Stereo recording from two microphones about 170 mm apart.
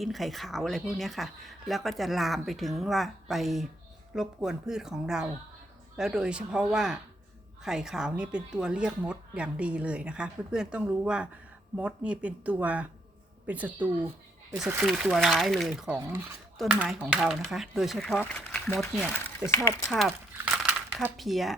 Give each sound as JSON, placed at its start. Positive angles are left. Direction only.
{"t": 0.0, "sound": "a woman's voice", "side_deg": 0}
{"t": 19.4, "sound": "a woman's voice", "side_deg": -5}
{"t": 20.6, "sound": "crumpling", "side_deg": 0}
{"t": 21.2, "sound": "speech", "side_deg": 0}